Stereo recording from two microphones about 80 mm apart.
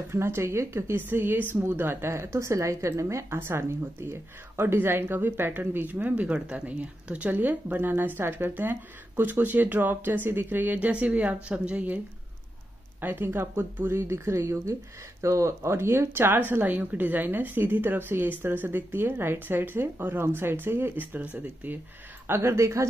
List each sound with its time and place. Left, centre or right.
0.1 s a woman's voice: right
13.0 s speech: right
22.3 s speech: right